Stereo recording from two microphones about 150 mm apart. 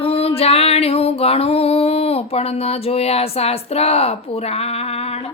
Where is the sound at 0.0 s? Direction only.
40° left (ahead or behind).